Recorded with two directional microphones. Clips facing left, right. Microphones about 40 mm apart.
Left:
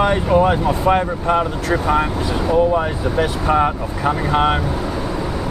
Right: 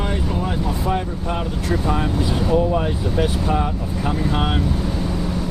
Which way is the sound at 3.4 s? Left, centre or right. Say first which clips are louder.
Left 6 dB; left.